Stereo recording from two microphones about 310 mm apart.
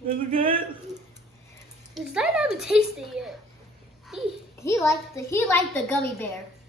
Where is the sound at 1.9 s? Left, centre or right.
Centre.